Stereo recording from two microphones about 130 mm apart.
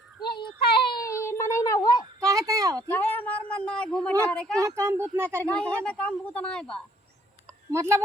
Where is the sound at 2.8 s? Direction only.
15° left (ahead or behind).